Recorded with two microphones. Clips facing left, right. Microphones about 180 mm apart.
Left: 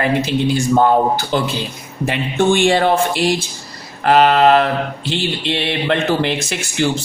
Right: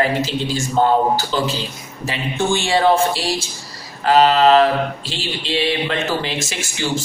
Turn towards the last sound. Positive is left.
turn(degrees=60)  # may be behind; listen again after turning